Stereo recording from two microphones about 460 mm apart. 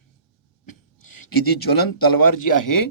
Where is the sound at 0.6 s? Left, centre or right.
Left.